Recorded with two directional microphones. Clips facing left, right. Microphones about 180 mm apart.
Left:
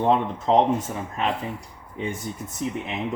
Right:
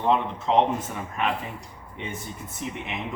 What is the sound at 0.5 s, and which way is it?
Speech, 35° left (ahead or behind).